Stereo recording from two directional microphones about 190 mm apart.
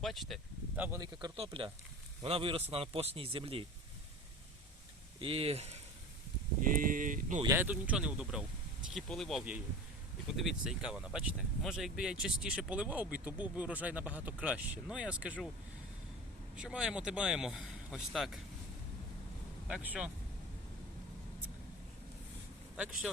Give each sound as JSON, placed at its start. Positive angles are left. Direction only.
{"t": 0.0, "sound": "a sound", "side_deg": 0}
{"t": 0.8, "sound": "speech", "side_deg": -15}
{"t": 5.2, "sound": "speech", "side_deg": -30}
{"t": 6.6, "sound": "speech", "side_deg": -45}
{"t": 7.4, "sound": "speech", "side_deg": -10}
{"t": 16.6, "sound": "speech", "side_deg": -5}
{"t": 19.6, "sound": "speech", "side_deg": -5}
{"t": 22.8, "sound": "speech", "side_deg": -5}